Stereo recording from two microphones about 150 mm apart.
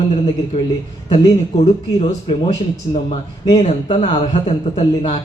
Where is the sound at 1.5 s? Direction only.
45° left (ahead or behind).